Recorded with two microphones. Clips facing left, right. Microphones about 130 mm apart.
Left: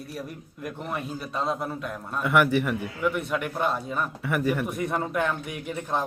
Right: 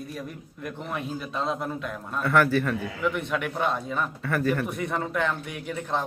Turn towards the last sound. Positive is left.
turn(degrees=10)  # may be behind; listen again after turning